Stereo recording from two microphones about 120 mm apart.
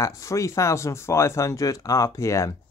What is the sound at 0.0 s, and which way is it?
Speech, 25° left (ahead or behind).